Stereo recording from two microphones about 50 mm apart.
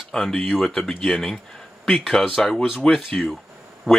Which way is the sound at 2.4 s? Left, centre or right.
Centre.